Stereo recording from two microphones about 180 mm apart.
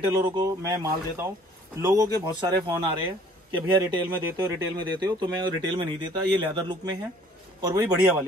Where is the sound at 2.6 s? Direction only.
25° right (ahead or behind).